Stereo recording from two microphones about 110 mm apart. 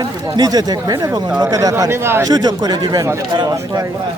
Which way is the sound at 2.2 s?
35° right (ahead or behind).